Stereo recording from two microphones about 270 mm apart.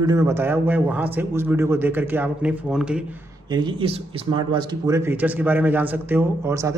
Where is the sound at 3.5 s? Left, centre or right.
Centre.